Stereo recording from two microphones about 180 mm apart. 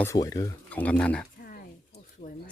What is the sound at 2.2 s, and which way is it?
Speech, 50° left (ahead or behind).